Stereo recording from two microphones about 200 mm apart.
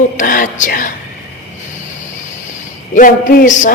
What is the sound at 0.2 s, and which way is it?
Speech, 40° left (ahead or behind).